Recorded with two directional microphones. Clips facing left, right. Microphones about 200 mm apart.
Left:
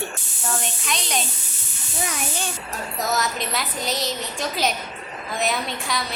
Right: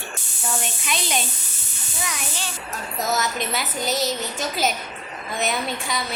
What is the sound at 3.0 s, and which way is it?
A woman's voice, centre (ahead or behind).